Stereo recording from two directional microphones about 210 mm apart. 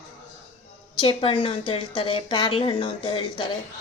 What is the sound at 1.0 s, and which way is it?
A woman's voice, 25° left (ahead or behind).